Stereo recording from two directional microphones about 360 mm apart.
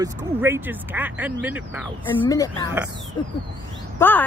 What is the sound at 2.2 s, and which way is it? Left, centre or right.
Speech, centre.